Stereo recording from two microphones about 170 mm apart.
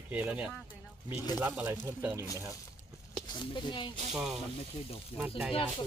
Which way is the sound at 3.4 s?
25° left (ahead or behind).